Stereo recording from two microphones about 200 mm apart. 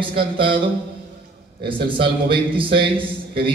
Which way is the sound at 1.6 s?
25° right (ahead or behind).